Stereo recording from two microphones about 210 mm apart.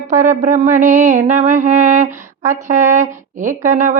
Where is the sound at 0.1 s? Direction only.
35° right (ahead or behind).